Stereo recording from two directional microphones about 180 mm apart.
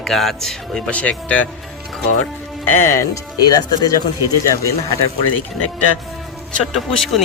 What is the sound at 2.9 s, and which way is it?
Speech, 15° left (ahead or behind).